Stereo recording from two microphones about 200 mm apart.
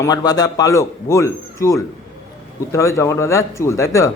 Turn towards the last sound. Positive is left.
turn(degrees=15)  # may be behind; listen again after turning